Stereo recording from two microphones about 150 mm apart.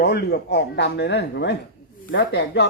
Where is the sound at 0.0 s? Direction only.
90° left.